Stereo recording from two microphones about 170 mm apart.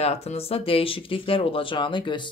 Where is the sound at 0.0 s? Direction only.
35° left (ahead or behind).